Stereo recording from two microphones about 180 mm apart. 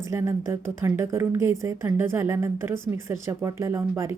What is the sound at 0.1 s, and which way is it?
A woman's voice, 15° right (ahead or behind).